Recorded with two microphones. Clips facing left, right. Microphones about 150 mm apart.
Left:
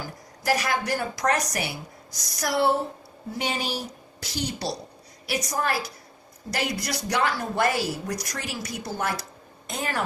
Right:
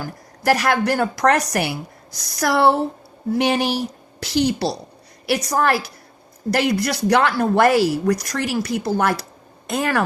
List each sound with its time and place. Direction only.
0.0 s a woman's voice: 65° right (ahead or behind)